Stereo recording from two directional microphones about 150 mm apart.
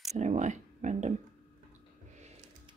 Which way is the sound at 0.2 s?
50° right (ahead or behind).